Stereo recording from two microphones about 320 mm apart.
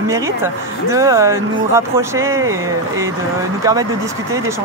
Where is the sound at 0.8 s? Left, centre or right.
Centre.